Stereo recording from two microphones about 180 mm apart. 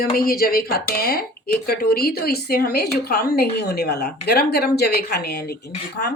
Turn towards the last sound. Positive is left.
turn(degrees=65)  # may be behind; listen again after turning